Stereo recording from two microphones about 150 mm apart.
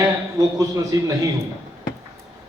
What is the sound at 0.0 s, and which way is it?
A man's voice, 20° right (ahead or behind).